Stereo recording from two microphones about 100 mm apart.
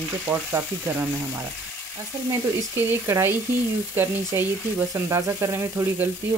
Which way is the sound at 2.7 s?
25° right (ahead or behind).